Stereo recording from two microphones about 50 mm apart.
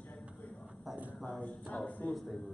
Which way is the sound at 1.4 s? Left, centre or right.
Left.